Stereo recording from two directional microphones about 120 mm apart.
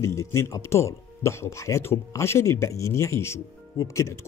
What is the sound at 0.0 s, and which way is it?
Speech, 25° left (ahead or behind).